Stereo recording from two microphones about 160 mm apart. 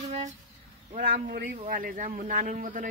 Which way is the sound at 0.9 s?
60° right (ahead or behind).